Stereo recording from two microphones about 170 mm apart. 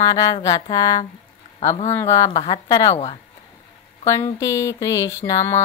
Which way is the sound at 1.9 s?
20° left (ahead or behind).